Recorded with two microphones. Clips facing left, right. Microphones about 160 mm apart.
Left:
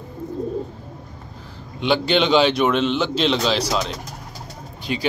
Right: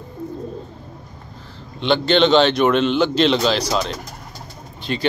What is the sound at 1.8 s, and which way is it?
A man's voice, 10° left (ahead or behind).